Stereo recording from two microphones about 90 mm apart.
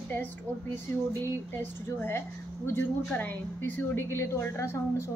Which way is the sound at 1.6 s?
25° left (ahead or behind).